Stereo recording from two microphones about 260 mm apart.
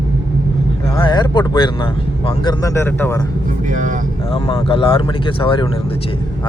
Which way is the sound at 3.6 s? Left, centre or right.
Right.